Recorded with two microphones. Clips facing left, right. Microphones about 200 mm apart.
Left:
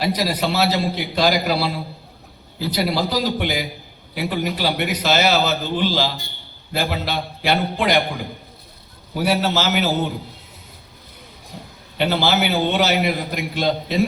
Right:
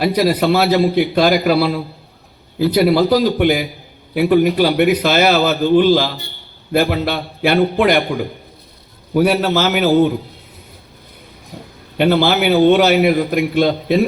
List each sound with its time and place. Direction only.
0.0 s a man's voice: 55° right (ahead or behind)
11.5 s a sound: 50° right (ahead or behind)
11.9 s a man's voice: 50° right (ahead or behind)